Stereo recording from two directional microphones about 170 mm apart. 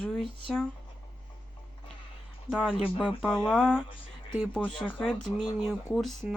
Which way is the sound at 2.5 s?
Centre (ahead or behind).